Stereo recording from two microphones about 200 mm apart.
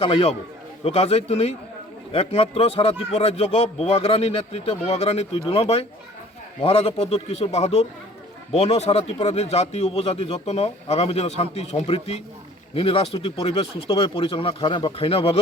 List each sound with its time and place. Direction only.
0.0 s a man's voice: 30° left (ahead or behind)